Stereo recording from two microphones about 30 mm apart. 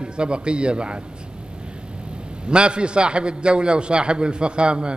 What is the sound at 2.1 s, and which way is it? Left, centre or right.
A man's voice, right.